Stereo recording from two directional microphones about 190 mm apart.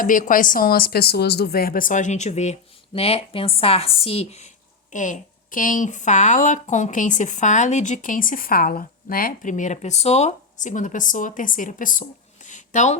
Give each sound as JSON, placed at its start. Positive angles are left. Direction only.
{"t": 0.0, "sound": "a woman's voice", "side_deg": 45}